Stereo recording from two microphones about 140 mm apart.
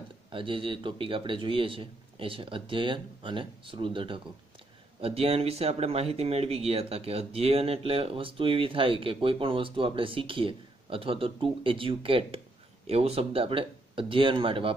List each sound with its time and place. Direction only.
0.3 s speech: 40° right (ahead or behind)